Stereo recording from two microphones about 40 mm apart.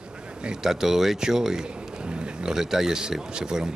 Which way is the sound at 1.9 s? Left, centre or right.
Right.